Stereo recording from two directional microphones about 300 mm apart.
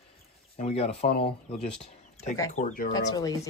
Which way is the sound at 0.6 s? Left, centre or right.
Left.